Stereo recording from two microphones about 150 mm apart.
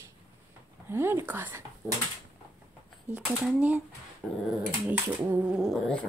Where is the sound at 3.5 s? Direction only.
10° right (ahead or behind).